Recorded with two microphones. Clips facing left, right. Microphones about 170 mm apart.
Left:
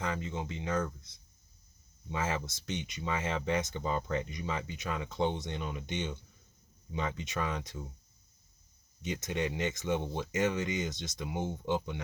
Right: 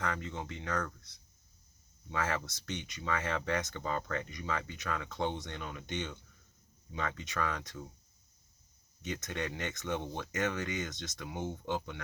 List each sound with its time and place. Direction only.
0.0 s speech: 20° left (ahead or behind)
2.0 s speech: 20° left (ahead or behind)
9.0 s speech: 20° left (ahead or behind)